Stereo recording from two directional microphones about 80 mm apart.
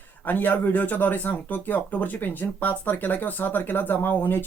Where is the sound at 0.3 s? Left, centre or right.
Left.